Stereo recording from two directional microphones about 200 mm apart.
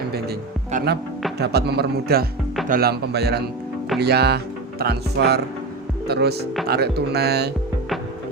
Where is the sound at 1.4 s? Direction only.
55° right (ahead or behind).